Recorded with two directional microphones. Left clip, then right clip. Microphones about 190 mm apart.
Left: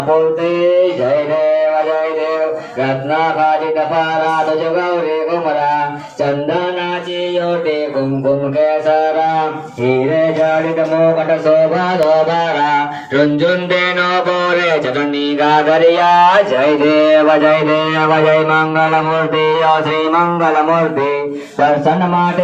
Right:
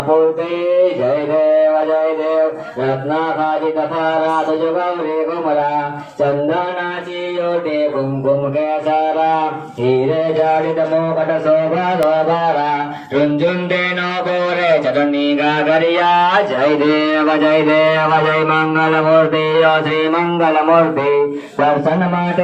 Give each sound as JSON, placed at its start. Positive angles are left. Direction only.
{"t": 12.5, "sound": "music", "side_deg": 30}
{"t": 14.5, "sound": "speech", "side_deg": 30}